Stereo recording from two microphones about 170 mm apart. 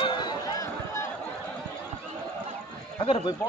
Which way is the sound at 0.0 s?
25° left (ahead or behind).